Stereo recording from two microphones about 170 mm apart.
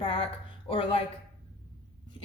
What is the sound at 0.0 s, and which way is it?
Speech, 35° left (ahead or behind).